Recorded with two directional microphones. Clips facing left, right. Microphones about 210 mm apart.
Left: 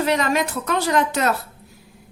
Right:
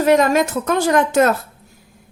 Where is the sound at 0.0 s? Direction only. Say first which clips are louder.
Right 6 dB; 45° right (ahead or behind).